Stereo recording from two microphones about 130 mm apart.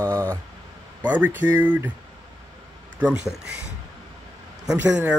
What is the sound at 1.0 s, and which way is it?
Speech, 10° right (ahead or behind).